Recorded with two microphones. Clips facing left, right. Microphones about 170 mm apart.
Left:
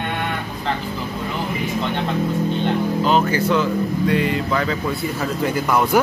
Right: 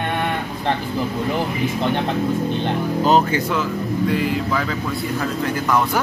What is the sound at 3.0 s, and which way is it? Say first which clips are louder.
Speech: right 3 dB; 40° right (ahead or behind).